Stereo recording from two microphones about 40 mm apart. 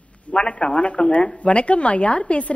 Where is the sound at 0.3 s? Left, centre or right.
Left.